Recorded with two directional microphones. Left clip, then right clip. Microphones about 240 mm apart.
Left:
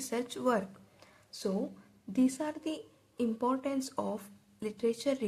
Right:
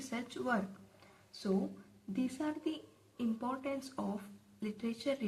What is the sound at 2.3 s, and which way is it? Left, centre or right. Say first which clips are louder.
Speech: left 2 dB; left.